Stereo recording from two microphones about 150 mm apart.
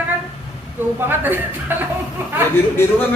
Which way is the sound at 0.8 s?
15° right (ahead or behind).